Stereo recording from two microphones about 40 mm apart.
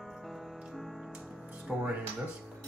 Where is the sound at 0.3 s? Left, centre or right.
Centre.